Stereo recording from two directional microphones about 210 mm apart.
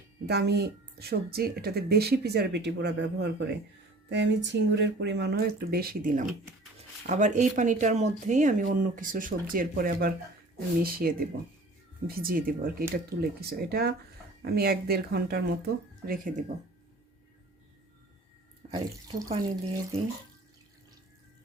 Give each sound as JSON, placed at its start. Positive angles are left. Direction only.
{"t": 0.3, "sound": "speech", "side_deg": -50}
{"t": 18.7, "sound": "speech", "side_deg": -25}